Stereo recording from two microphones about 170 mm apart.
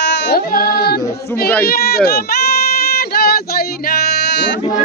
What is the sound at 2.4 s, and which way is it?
Child singing, 65° left (ahead or behind).